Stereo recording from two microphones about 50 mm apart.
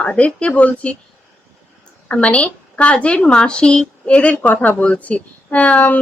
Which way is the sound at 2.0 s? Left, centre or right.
Left.